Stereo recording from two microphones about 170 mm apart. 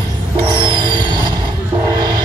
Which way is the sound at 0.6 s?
25° right (ahead or behind).